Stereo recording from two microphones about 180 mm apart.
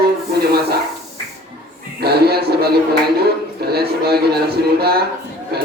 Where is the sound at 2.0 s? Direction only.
60° right (ahead or behind).